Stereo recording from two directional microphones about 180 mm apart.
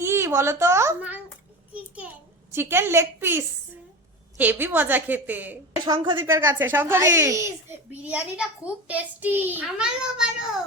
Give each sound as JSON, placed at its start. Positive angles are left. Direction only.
{"t": 0.0, "sound": "a child's voice", "side_deg": -15}
{"t": 2.5, "sound": "a child's voice", "side_deg": -15}
{"t": 5.8, "sound": "a woman's voice", "side_deg": -25}
{"t": 6.1, "sound": "a child's voice", "side_deg": -15}